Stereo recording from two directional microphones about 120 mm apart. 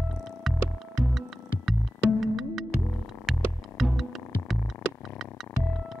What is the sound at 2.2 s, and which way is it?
Music, centre (ahead or behind).